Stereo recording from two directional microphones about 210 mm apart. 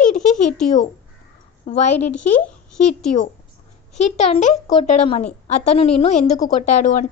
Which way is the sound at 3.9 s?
30° left (ahead or behind).